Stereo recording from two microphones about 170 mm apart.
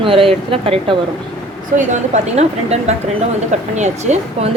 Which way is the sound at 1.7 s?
45° right (ahead or behind).